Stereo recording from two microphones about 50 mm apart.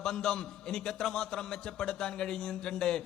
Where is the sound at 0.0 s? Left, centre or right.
Centre.